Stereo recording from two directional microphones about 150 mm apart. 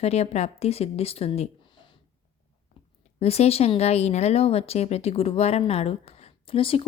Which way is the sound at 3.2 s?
45° left (ahead or behind).